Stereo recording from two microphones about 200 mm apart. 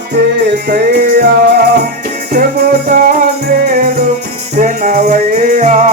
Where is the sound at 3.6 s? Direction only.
45° right (ahead or behind).